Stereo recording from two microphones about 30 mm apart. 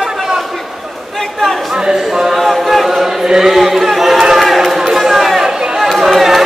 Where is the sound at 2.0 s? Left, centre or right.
Centre.